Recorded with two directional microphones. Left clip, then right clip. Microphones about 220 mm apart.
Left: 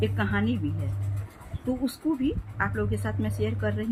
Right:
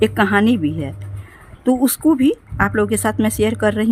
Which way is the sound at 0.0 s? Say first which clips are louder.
Right 13 dB; 50° right (ahead or behind).